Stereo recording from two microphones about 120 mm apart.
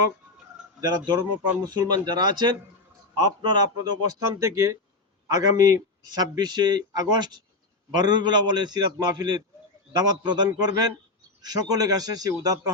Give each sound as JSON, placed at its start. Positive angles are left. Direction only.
{"t": 0.8, "sound": "speech", "side_deg": -35}